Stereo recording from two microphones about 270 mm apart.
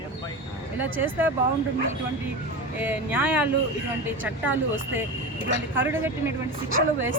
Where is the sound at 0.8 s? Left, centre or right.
Centre.